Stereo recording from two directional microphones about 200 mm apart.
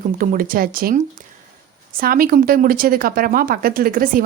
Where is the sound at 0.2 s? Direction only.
45° right (ahead or behind).